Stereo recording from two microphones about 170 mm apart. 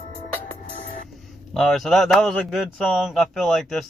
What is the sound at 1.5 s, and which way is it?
A man's voice, centre (ahead or behind).